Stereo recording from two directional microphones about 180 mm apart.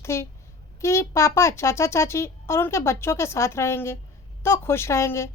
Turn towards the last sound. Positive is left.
turn(degrees=15)  # may be behind; listen again after turning